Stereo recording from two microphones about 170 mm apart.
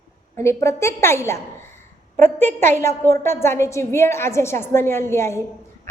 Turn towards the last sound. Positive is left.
turn(degrees=15)  # may be behind; listen again after turning